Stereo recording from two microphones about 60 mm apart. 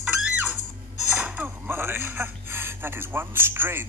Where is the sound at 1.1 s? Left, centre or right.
Right.